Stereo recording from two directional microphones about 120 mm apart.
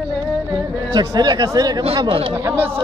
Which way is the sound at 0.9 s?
35° right (ahead or behind).